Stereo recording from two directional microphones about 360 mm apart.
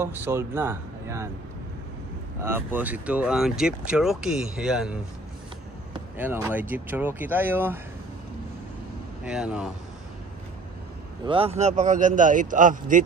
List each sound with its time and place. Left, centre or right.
0.0 s speech: centre
2.4 s speech: centre
5.9 s speech: centre
9.2 s speech: centre
11.2 s speech: centre